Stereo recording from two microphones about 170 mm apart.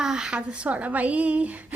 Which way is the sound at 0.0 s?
5° right (ahead or behind).